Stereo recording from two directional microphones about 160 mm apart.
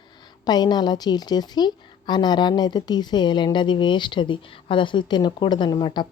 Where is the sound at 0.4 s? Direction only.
25° left (ahead or behind).